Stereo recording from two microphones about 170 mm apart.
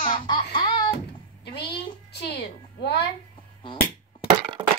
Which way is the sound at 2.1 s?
75° left (ahead or behind).